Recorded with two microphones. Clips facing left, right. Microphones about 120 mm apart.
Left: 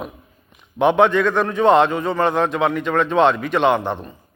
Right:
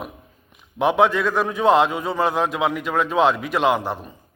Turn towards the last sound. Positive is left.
turn(degrees=-5)  # may be behind; listen again after turning